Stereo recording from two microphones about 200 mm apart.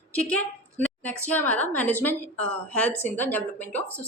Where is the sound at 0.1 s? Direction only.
5° left (ahead or behind).